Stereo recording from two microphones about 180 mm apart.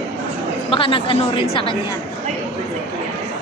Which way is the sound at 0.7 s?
30° left (ahead or behind).